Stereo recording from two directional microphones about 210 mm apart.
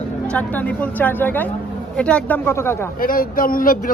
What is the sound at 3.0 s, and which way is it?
Speech, 40° left (ahead or behind).